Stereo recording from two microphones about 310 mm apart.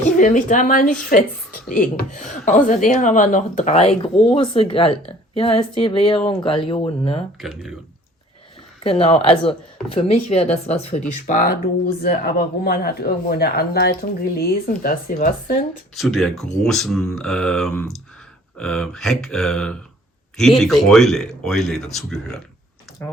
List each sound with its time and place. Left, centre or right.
0.0 s a woman's voice: left
7.4 s speech: centre
8.8 s speech: centre
16.0 s speech: centre